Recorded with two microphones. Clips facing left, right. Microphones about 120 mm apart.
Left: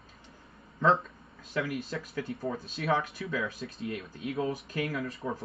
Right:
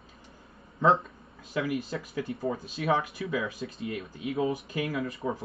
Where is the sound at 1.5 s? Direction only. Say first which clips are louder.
Right 2 dB; centre (ahead or behind).